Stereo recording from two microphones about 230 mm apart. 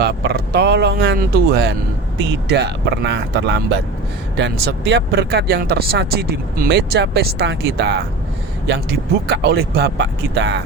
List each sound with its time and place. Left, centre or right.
0.0 s speech: right